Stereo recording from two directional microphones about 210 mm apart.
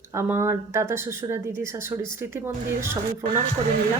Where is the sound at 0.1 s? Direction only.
10° right (ahead or behind).